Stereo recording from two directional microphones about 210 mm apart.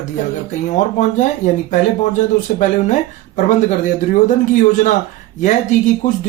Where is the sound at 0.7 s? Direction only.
35° left (ahead or behind).